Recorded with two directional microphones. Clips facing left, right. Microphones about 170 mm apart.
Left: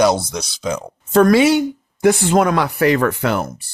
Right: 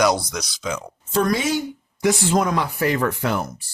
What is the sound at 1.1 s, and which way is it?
Speech, 65° left (ahead or behind).